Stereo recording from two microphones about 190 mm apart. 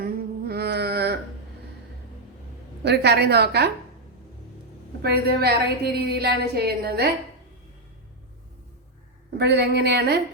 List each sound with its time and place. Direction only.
0.0 s a sound: 55° right (ahead or behind)
2.8 s a woman's voice: 60° right (ahead or behind)
5.0 s a woman's voice: 55° right (ahead or behind)
9.4 s a woman's voice: 60° right (ahead or behind)